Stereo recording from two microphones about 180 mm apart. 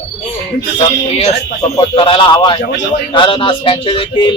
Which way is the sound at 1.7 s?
30° left (ahead or behind).